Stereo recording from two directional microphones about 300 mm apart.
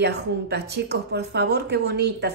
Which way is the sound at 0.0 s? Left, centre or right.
Right.